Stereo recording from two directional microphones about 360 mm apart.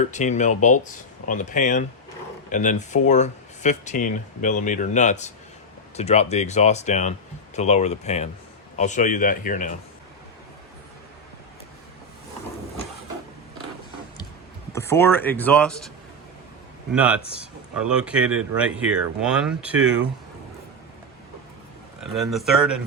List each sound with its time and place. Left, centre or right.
0.0 s speech: centre
14.7 s speech: centre
16.9 s speech: centre
22.1 s speech: centre